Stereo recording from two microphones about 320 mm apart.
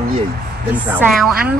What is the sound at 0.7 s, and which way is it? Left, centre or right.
Speech, centre.